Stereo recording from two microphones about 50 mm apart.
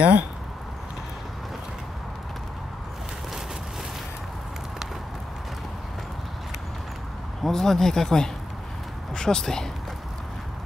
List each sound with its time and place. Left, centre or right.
0.0 s speech: right
7.4 s speech: centre